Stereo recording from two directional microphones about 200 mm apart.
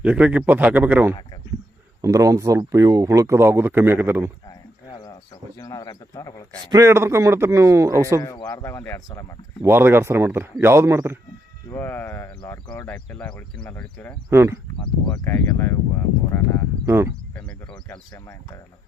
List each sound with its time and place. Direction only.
0.0 s speech: 5° right (ahead or behind)
4.4 s a sound: 20° left (ahead or behind)
6.7 s speech: 15° right (ahead or behind)
8.2 s speech: 20° left (ahead or behind)
9.6 s speech: 10° right (ahead or behind)
11.7 s speech: 10° left (ahead or behind)
14.3 s speech: 15° right (ahead or behind)
15.0 s speech: 5° left (ahead or behind)
16.8 s speech: 15° right (ahead or behind)
17.3 s cricket: 5° left (ahead or behind)
18.1 s speech: 20° left (ahead or behind)